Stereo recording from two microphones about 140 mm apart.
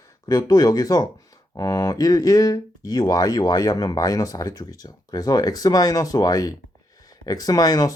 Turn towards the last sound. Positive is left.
turn(degrees=25)  # may be behind; listen again after turning